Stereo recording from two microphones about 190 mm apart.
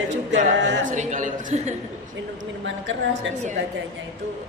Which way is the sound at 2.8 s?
70° right (ahead or behind).